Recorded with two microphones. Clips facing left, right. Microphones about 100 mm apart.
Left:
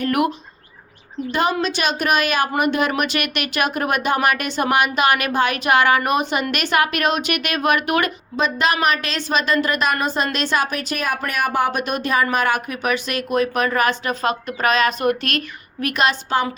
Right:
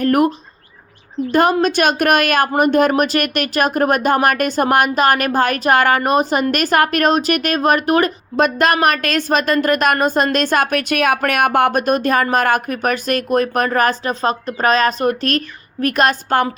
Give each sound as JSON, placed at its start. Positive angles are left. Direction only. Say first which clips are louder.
{"t": 0.0, "sound": "speech", "louder": "right 5 dB", "side_deg": -40}
{"t": 1.3, "sound": "speech", "louder": "right 6 dB", "side_deg": -50}
{"t": 8.4, "sound": "speech", "louder": "right 5 dB", "side_deg": -50}